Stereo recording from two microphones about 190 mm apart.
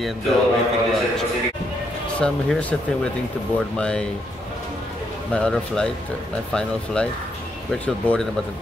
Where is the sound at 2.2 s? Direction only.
5° left (ahead or behind).